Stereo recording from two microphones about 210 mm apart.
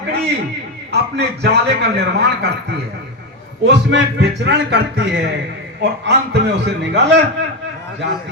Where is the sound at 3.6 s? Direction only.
55° right (ahead or behind).